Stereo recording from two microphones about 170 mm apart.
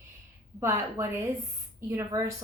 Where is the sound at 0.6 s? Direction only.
15° right (ahead or behind).